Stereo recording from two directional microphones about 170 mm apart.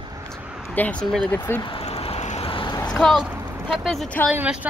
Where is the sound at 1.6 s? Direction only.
35° left (ahead or behind).